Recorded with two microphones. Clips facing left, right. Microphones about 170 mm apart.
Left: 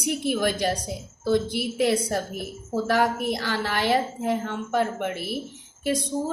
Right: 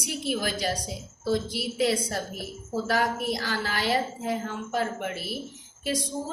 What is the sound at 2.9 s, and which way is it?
A woman's voice, 55° left (ahead or behind).